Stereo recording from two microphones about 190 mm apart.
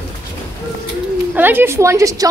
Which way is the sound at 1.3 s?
10° right (ahead or behind).